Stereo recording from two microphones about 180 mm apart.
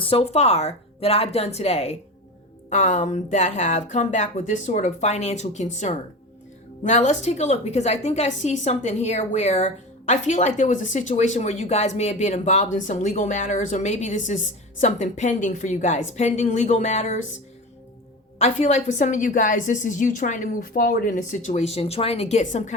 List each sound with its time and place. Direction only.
0.0 s a woman's voice: 30° left (ahead or behind)
18.3 s a woman's voice: 40° left (ahead or behind)